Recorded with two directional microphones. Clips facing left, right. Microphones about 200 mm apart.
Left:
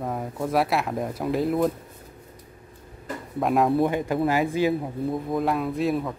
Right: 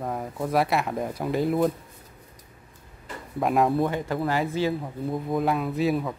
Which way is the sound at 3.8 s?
20° left (ahead or behind).